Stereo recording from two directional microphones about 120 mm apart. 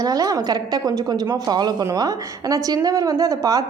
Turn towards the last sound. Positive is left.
turn(degrees=-30)  # may be behind; listen again after turning